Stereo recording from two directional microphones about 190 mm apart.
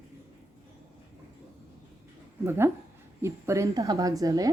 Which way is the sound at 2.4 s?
15° right (ahead or behind).